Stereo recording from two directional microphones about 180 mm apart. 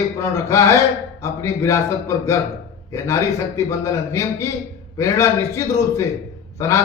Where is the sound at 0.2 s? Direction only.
15° left (ahead or behind).